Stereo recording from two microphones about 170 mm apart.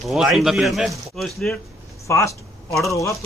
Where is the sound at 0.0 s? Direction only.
Centre (ahead or behind).